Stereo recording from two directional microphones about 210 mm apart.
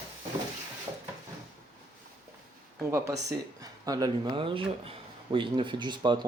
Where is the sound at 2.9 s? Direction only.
15° right (ahead or behind).